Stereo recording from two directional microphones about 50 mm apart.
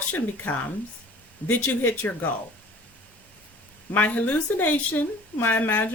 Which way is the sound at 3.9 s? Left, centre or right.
Left.